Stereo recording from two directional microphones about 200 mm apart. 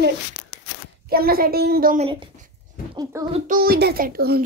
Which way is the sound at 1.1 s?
50° right (ahead or behind).